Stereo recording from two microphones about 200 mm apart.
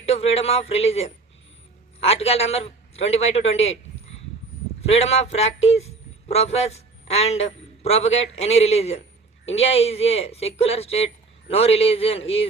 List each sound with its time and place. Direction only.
0.0 s speech: 30° left (ahead or behind)
4.8 s a man's voice: 30° left (ahead or behind)